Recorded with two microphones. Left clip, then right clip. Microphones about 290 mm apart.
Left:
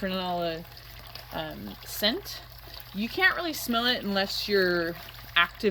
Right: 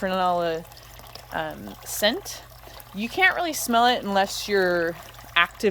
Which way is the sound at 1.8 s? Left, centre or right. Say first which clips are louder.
Right 5 dB; centre.